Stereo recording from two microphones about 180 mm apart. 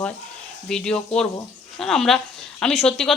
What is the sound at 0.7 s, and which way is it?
Speech, 5° left (ahead or behind).